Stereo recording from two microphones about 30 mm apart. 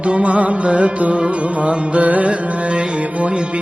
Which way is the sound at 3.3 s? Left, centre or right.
Right.